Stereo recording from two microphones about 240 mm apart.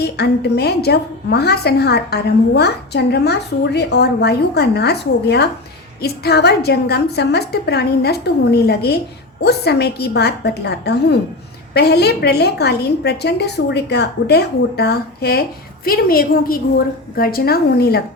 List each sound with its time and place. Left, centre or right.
0.0 s a woman's voice: left